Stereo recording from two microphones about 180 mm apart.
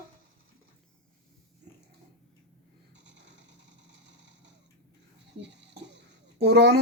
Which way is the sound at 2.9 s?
80° right.